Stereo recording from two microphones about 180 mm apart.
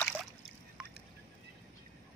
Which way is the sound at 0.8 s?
5° right (ahead or behind).